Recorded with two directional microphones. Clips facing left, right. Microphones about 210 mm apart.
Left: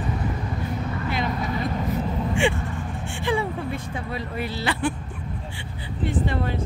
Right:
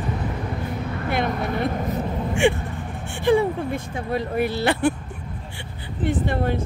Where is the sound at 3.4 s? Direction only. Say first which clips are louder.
Right 5 dB; 45° right (ahead or behind).